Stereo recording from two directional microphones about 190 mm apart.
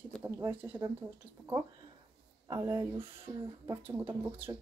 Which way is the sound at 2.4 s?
15° right (ahead or behind).